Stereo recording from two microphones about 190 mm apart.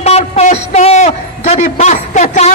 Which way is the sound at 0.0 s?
35° left (ahead or behind).